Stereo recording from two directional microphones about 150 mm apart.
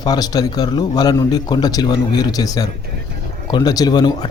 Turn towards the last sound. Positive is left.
turn(degrees=25)  # may be behind; listen again after turning